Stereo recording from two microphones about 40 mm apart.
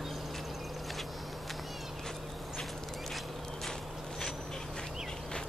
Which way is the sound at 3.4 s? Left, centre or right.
Centre.